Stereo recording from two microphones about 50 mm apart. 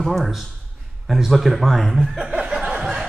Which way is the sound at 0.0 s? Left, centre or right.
Centre.